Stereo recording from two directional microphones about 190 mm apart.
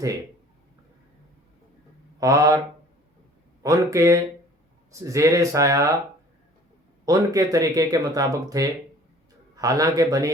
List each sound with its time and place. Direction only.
2.2 s speech: 15° right (ahead or behind)
3.6 s speech: 15° right (ahead or behind)
7.0 s speech: 20° right (ahead or behind)